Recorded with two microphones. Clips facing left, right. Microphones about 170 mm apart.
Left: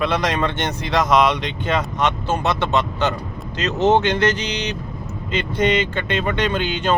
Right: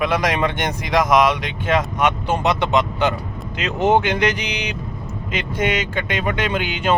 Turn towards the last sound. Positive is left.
turn(degrees=-10)  # may be behind; listen again after turning